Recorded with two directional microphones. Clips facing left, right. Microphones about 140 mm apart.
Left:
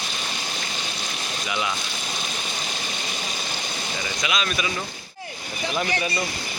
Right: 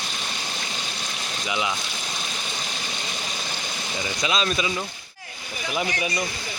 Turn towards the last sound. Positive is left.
turn(degrees=-30)  # may be behind; listen again after turning